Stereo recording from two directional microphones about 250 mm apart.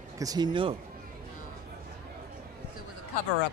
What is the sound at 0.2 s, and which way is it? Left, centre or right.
Speech, centre.